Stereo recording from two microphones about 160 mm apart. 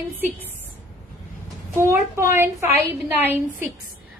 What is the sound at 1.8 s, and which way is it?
A woman's voice, 15° right (ahead or behind).